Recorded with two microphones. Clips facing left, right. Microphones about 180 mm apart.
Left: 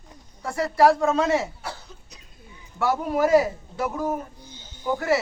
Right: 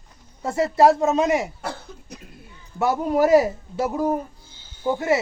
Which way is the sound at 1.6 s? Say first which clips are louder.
Right 5 dB; 55° right (ahead or behind).